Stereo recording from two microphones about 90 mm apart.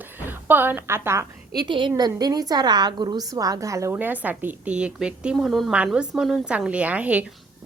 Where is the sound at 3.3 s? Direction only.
40° right (ahead or behind).